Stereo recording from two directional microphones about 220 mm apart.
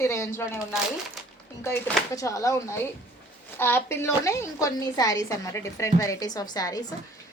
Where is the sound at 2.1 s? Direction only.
15° left (ahead or behind).